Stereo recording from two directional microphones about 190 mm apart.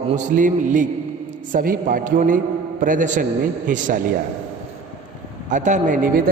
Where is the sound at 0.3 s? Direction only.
40° right (ahead or behind).